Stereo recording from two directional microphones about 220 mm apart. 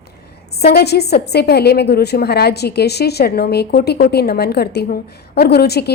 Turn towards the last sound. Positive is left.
turn(degrees=45)  # may be behind; listen again after turning